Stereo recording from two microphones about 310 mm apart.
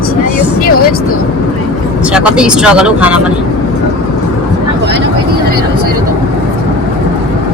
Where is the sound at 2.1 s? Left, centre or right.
Centre.